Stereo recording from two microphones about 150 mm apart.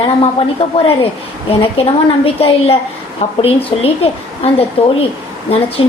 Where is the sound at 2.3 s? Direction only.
40° left (ahead or behind).